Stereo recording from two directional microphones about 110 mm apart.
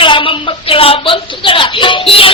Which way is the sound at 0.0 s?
50° left (ahead or behind).